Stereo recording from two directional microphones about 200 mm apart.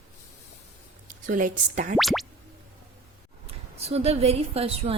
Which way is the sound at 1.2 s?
40° right (ahead or behind).